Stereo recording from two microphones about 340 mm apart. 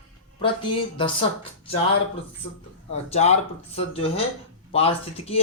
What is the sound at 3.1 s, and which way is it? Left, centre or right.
Speech, centre.